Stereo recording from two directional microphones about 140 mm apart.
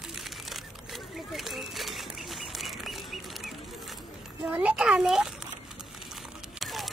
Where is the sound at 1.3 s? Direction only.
Centre (ahead or behind).